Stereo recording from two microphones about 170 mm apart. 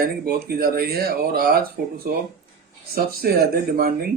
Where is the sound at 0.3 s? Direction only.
65° right (ahead or behind).